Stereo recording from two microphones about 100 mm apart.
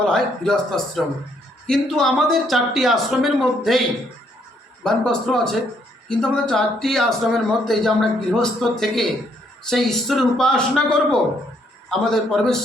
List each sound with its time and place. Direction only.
0.1 s a man's voice: 5° left (ahead or behind)